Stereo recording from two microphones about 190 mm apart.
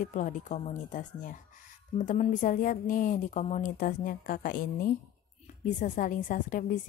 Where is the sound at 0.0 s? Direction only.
40° left (ahead or behind).